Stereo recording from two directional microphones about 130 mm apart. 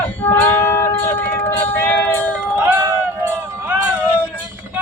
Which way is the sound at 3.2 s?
15° right (ahead or behind).